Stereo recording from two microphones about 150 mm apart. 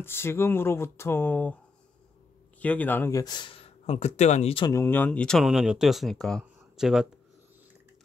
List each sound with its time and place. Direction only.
0.0 s speech: 15° left (ahead or behind)
2.6 s speech: 10° left (ahead or behind); by 4.6 s 45° left (ahead or behind)
4.8 s speech: 10° left (ahead or behind); by 7.1 s 5° right (ahead or behind)